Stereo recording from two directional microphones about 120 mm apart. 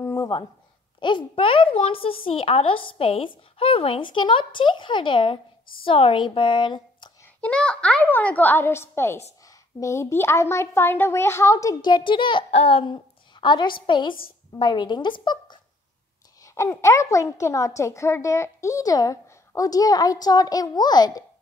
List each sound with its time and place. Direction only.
0.0 s a sound: 25° left (ahead or behind)
0.9 s a child's voice: 40° left (ahead or behind)
7.4 s a child's voice: 10° left (ahead or behind); by 12.4 s 45° left (ahead or behind)
12.4 s a woman's voice: 55° left (ahead or behind); by 15.6 s 40° left (ahead or behind)
16.4 s a woman's voice: 25° left (ahead or behind)